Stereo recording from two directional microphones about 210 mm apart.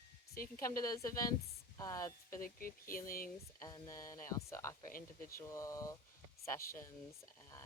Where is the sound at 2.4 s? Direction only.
45° left (ahead or behind).